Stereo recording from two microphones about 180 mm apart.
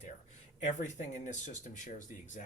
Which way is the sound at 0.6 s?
40° left (ahead or behind).